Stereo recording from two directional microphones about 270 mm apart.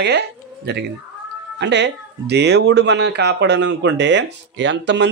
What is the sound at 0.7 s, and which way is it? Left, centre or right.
Speech, right.